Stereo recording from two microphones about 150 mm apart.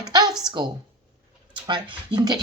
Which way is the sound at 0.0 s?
25° right (ahead or behind).